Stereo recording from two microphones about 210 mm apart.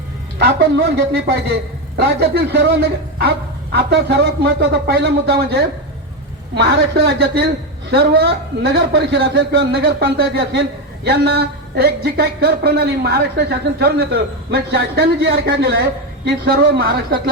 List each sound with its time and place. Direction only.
0.3 s speech: 50° right (ahead or behind)